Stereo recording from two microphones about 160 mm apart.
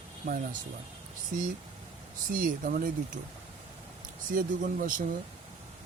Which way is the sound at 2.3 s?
60° right (ahead or behind).